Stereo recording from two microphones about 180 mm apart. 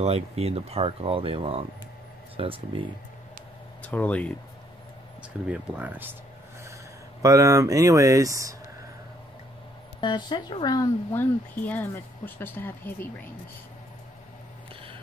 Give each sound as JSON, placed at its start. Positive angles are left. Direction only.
{"t": 0.0, "sound": "speech", "side_deg": -35}
{"t": 3.8, "sound": "speech", "side_deg": 10}
{"t": 5.5, "sound": "speech", "side_deg": -10}
{"t": 7.2, "sound": "speech", "side_deg": -20}
{"t": 9.9, "sound": "speech", "side_deg": 25}